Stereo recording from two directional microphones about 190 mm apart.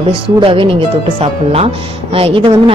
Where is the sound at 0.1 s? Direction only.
30° right (ahead or behind).